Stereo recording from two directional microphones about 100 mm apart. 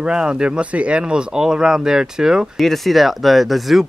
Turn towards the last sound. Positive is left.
turn(degrees=0)  # may be behind; listen again after turning